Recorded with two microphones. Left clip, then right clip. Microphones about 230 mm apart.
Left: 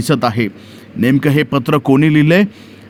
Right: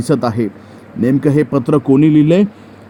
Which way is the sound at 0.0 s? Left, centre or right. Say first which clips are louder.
Left 1 dB; left.